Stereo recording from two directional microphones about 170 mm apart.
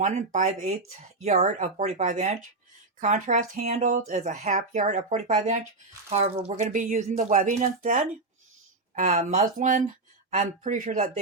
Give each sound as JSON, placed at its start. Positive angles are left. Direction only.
{"t": 0.0, "sound": "speech", "side_deg": -45}
{"t": 6.1, "sound": "speech", "side_deg": -35}